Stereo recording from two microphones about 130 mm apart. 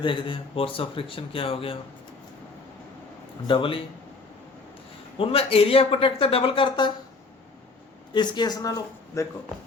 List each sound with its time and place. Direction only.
0.0 s speech: 40° left (ahead or behind)
3.4 s speech: 40° left (ahead or behind)
5.1 s speech: 45° left (ahead or behind)
8.1 s speech: 35° left (ahead or behind)